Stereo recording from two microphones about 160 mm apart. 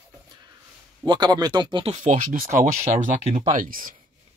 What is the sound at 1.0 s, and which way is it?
Speech, 25° right (ahead or behind).